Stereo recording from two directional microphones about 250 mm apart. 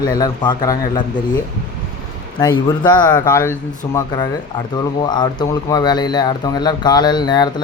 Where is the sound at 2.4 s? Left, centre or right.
Centre.